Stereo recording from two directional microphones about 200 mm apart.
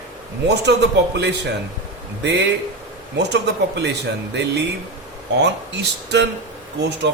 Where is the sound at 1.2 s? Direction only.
55° right (ahead or behind).